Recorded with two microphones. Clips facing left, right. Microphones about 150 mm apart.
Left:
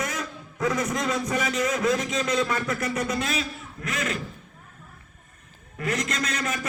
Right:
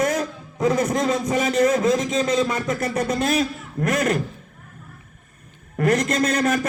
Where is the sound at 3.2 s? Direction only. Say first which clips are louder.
Right 8 dB; 50° right (ahead or behind).